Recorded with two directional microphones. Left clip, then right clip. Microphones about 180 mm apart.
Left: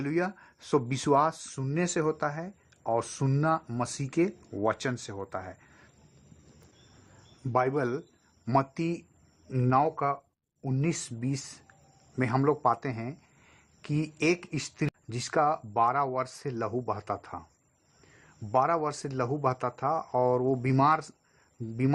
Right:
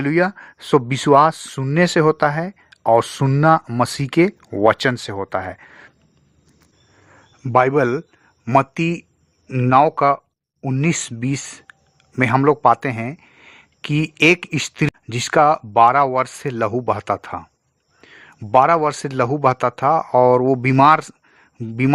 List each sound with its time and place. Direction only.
0.0 s speech: 30° right (ahead or behind)
7.5 s speech: 45° right (ahead or behind)
11.5 s a sound: 40° right (ahead or behind)
12.6 s speech: 30° right (ahead or behind)
14.8 s speech: 40° right (ahead or behind)
16.6 s speech: 45° right (ahead or behind)
17.0 s speech: 30° right (ahead or behind)
18.0 s speech: 45° right (ahead or behind)
20.6 s speech: 30° right (ahead or behind)